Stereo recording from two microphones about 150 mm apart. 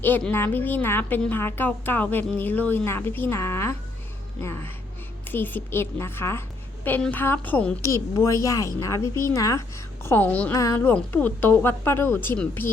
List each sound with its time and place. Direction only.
0.0 s speech: 10° left (ahead or behind)
7.8 s a woman's voice: 20° left (ahead or behind)
10.5 s speech: 20° left (ahead or behind)